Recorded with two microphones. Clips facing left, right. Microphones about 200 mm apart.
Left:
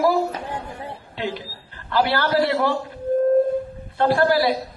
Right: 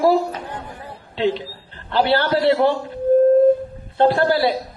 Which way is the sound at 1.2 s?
25° right (ahead or behind).